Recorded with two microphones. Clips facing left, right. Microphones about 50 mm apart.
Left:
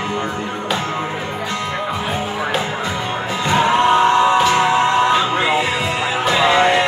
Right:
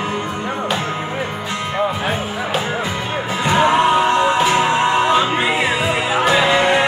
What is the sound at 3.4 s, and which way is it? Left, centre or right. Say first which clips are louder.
Music: right 1 dB; centre.